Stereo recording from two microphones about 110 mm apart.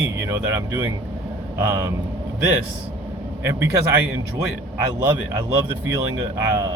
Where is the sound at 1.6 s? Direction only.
25° right (ahead or behind).